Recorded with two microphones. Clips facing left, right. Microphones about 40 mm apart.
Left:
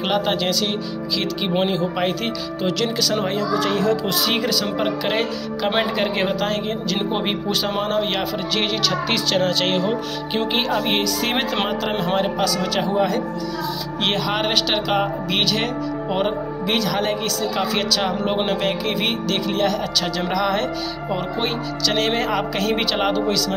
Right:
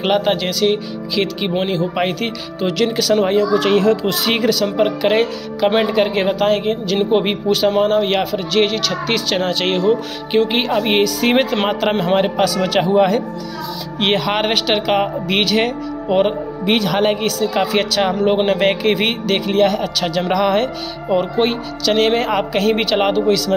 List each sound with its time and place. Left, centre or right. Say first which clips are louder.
0.0 s speech: right 4 dB; centre
3.5 s speech: right 3 dB; right
4.0 s speech: right 3 dB; right
4.4 s speech: right 6 dB; centre
11.1 s speech: right 6 dB; centre
12.2 s a man's voice: right 5 dB; right
13.9 s speech: right 5 dB; centre
16.6 s a man's voice: right 6 dB; right
17.2 s speech: right 5 dB; centre
18.6 s speech: right 6 dB; right